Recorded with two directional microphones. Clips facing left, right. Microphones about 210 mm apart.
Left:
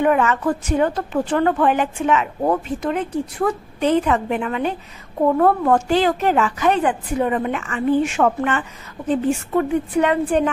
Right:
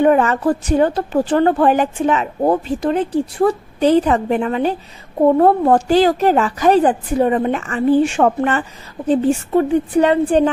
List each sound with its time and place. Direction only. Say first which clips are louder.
0.0 s a woman's voice: right 4 dB; 35° right (ahead or behind)